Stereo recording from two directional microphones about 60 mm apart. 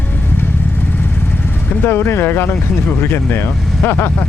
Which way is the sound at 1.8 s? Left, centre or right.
Left.